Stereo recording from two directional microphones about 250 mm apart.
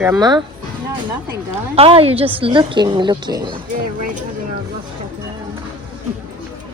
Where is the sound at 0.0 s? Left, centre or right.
Centre.